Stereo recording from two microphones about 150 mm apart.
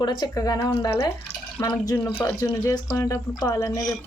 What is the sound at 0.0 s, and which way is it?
Speech, 30° left (ahead or behind).